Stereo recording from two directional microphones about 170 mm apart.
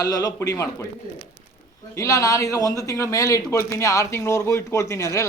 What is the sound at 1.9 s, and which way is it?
Speech, 20° left (ahead or behind).